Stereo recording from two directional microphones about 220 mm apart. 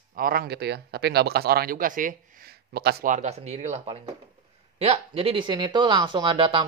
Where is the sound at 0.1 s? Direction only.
40° right (ahead or behind).